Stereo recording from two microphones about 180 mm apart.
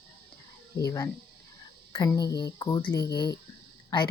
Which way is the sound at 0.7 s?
20° left (ahead or behind).